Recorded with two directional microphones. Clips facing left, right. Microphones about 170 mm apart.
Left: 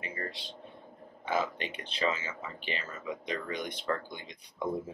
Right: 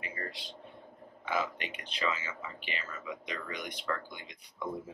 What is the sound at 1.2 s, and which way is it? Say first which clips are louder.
Speech: left 2 dB; 30° left (ahead or behind).